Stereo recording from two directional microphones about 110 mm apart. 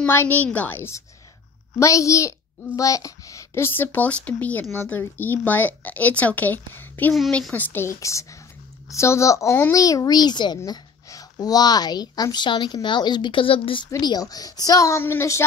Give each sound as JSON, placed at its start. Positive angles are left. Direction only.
{"t": 0.0, "sound": "a child's voice", "side_deg": 20}
{"t": 7.2, "sound": "a woman's voice", "side_deg": 5}
{"t": 13.8, "sound": "a woman's voice", "side_deg": 35}